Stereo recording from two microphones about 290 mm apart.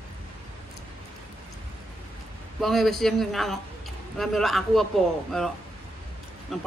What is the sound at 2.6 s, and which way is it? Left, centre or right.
A man's voice, centre.